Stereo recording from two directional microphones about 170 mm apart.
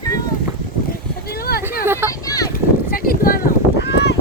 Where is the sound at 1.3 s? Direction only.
65° left (ahead or behind).